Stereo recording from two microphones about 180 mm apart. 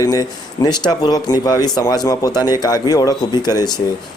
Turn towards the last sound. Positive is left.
turn(degrees=20)  # may be behind; listen again after turning